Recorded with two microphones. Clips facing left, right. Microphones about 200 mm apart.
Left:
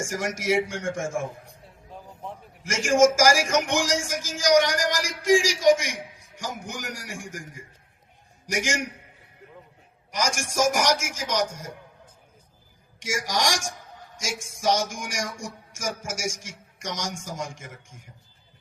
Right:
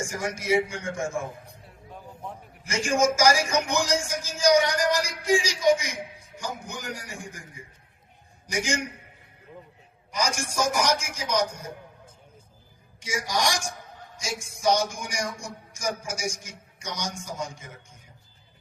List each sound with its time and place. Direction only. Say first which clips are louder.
0.0 s speech: left 2 dB; 90° left
2.6 s speech: left 4 dB; 90° left
8.4 s speech: left 1 dB; 90° left
10.1 s speech: even; 90° left
13.0 s speech: left 1 dB; 90° left